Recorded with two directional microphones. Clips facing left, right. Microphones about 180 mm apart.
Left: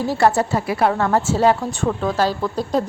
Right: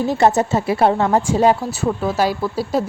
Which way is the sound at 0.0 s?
20° right (ahead or behind).